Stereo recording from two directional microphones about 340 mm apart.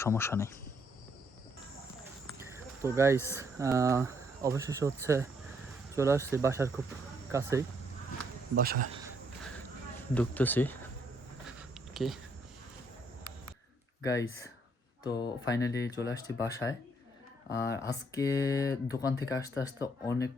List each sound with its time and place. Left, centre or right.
0.0 s speech: centre
2.4 s cricket: centre
3.3 s speech: centre
8.5 s speech: right
10.2 s speech: centre
11.4 s a sound: centre
14.0 s speech: centre